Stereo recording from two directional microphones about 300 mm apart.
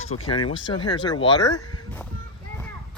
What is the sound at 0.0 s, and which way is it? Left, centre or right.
Speech, centre.